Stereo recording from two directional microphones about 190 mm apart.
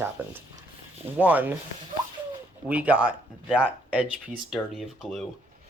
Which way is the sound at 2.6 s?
10° right (ahead or behind).